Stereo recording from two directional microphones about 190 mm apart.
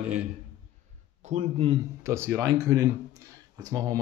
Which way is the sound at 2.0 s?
15° right (ahead or behind).